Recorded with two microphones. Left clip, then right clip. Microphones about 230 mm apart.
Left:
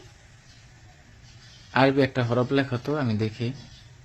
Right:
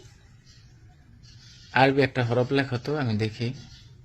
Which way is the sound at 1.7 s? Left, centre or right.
Centre.